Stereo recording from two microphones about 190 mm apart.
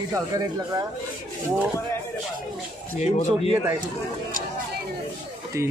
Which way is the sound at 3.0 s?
35° left (ahead or behind).